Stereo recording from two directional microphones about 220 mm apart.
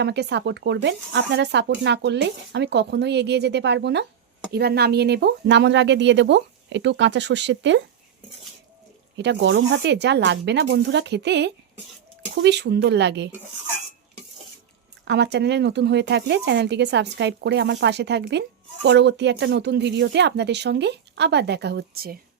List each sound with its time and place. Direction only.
0.0 s speech: 50° right (ahead or behind)
9.1 s speech: 50° right (ahead or behind)
15.0 s speech: 50° right (ahead or behind)